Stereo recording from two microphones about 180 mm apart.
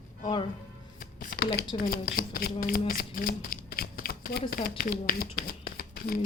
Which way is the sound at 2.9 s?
50° left (ahead or behind).